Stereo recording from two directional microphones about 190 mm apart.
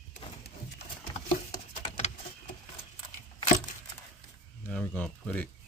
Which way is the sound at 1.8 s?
35° left (ahead or behind).